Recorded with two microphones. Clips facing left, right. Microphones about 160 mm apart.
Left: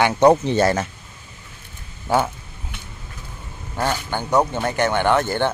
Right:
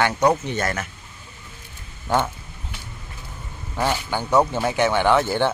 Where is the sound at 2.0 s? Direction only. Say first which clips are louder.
Left 2 dB; 10° left (ahead or behind).